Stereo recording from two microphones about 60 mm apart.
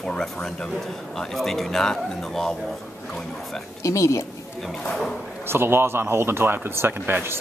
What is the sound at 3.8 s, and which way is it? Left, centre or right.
Speech, left.